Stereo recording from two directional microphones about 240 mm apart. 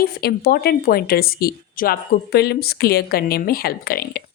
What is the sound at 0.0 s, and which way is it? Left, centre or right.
A woman's voice, left.